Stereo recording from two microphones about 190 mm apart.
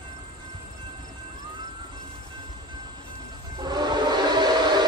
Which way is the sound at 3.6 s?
20° right (ahead or behind).